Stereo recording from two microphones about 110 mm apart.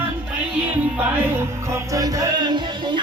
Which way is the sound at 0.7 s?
20° right (ahead or behind).